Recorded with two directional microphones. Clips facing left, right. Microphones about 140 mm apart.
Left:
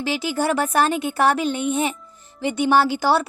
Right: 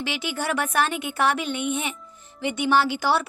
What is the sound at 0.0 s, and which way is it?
A child's voice, 35° left (ahead or behind).